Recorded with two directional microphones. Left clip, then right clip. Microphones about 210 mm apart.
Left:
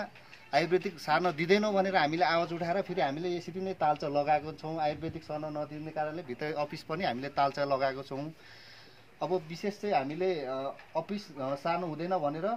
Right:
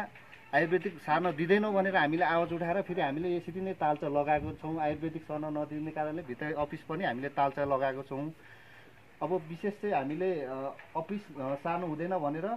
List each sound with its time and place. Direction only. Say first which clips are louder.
0.0 s speech: even; 25° left (ahead or behind)
9.8 s speech: left 2 dB; 25° left (ahead or behind)